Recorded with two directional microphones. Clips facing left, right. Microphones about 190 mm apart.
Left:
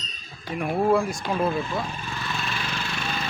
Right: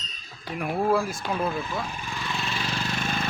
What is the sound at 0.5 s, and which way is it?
Speech, centre (ahead or behind).